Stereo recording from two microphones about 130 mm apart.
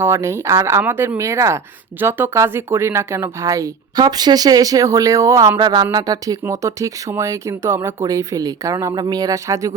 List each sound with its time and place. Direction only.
0.0 s speech: 20° right (ahead or behind)
5.5 s speech: 35° right (ahead or behind)